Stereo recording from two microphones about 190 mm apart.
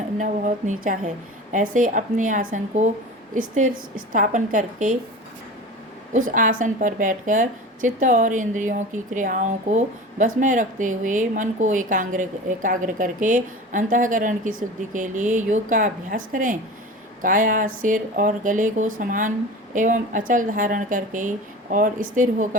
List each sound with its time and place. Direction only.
0.2 s a woman's voice: 40° right (ahead or behind)
6.1 s a woman's voice: 45° right (ahead or behind)